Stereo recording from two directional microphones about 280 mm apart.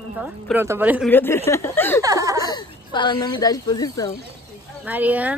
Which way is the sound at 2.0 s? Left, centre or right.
Centre.